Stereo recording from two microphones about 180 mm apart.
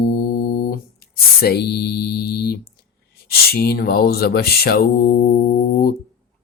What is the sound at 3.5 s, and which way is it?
Mantra, 60° left (ahead or behind).